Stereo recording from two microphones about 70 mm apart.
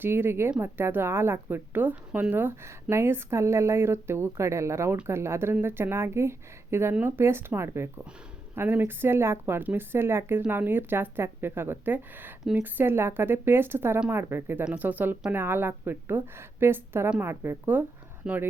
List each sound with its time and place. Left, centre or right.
0.0 s speech: right
2.9 s speech: right
8.5 s speech: right
18.2 s speech: centre